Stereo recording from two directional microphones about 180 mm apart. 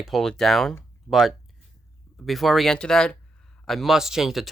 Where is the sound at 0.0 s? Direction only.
Centre (ahead or behind).